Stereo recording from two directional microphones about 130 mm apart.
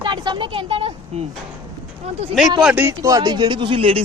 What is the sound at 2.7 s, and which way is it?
Speech, 20° right (ahead or behind).